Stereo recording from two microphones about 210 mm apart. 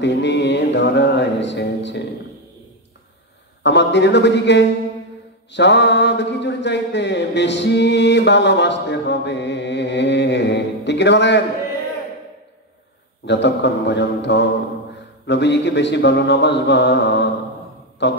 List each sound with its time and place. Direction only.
0.0 s music: 55° left (ahead or behind)
3.6 s speech: 55° left (ahead or behind)
5.5 s mantra: 55° left (ahead or behind)
13.2 s mantra: 55° left (ahead or behind)